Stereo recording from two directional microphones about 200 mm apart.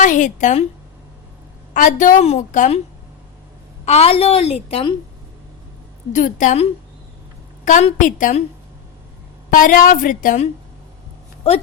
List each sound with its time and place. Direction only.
0.0 s a woman's voice: 40° left (ahead or behind)
1.7 s a woman's voice: 40° left (ahead or behind)
3.8 s a woman's voice: 30° left (ahead or behind)
6.1 s a woman's voice: 40° left (ahead or behind)
9.5 s a woman's voice: 40° left (ahead or behind)